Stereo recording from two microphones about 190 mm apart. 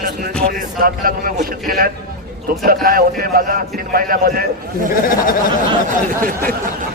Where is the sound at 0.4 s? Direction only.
50° right (ahead or behind).